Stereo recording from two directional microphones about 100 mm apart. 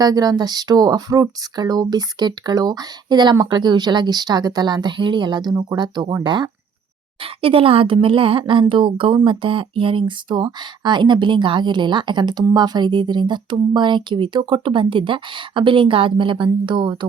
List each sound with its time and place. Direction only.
0.0 s speech: 40° right (ahead or behind)
7.2 s a woman's voice: 65° right (ahead or behind)